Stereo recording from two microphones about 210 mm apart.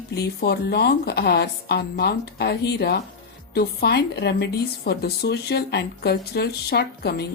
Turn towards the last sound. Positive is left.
turn(degrees=50)  # may be behind; listen again after turning